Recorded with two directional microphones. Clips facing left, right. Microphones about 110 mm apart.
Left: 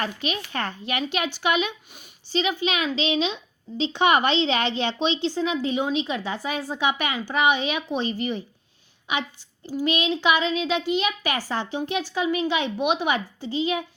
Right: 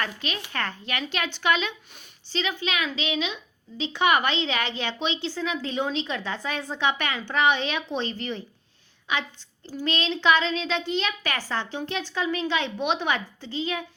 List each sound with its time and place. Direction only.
0.0 s a woman's voice: 20° left (ahead or behind)